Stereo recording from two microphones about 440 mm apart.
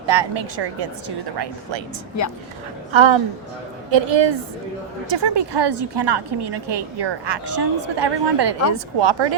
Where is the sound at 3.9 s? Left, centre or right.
Right.